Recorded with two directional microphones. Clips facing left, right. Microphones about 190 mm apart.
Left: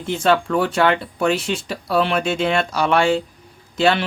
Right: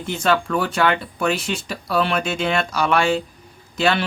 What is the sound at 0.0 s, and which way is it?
Speech, 30° left (ahead or behind).